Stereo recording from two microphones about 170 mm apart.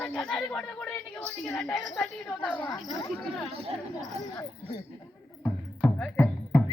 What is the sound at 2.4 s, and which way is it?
Speech, 10° left (ahead or behind).